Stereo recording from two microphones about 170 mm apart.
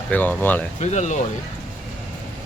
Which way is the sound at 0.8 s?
45° left (ahead or behind).